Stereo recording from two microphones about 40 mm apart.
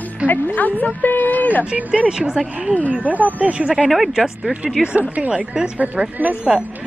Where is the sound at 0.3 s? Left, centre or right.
Left.